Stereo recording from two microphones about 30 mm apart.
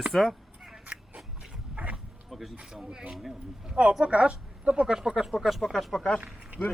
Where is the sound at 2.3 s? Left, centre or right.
Centre.